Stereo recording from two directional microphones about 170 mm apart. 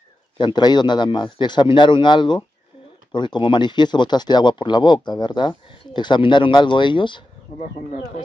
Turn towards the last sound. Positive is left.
turn(degrees=30)  # may be behind; listen again after turning